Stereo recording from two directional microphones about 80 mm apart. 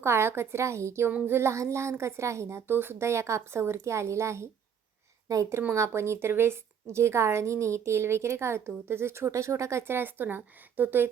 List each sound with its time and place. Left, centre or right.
0.0 s a woman's voice: right